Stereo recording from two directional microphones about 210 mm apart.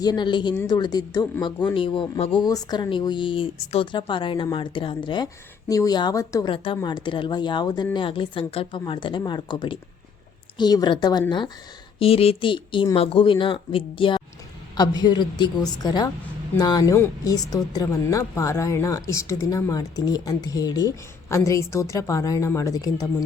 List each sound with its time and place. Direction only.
0.0 s a woman's voice: 20° left (ahead or behind)